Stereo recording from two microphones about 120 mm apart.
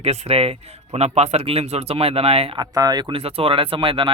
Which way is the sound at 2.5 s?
30° right (ahead or behind).